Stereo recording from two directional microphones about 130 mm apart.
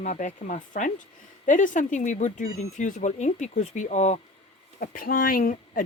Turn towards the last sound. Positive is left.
turn(degrees=90)